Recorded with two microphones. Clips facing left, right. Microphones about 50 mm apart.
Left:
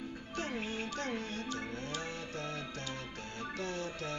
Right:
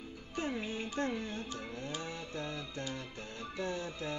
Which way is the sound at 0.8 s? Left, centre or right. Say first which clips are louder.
Right 3 dB; right.